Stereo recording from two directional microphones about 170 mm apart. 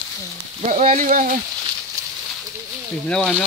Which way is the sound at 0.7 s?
50° right (ahead or behind).